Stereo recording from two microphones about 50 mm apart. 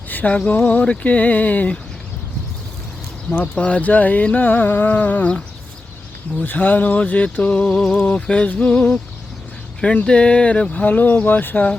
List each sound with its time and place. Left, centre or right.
0.1 s a sound: left
0.3 s speech: left
3.2 s speech: left
6.4 s speech: left